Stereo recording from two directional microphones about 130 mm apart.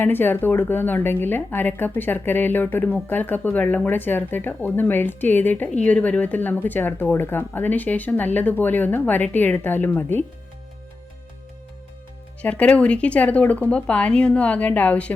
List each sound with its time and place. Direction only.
0.0 s a woman's voice: 15° left (ahead or behind)
12.4 s a woman's voice: 10° left (ahead or behind)